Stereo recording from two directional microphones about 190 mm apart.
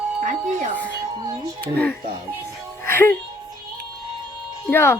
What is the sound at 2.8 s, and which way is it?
Music, 10° left (ahead or behind).